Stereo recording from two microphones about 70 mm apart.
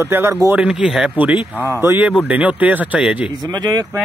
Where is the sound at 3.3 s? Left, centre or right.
Right.